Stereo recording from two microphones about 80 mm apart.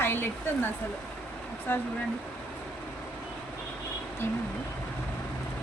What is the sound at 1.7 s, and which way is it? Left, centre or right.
Speech, left.